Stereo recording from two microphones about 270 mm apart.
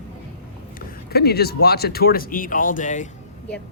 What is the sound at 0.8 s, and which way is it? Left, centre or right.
Speech, left.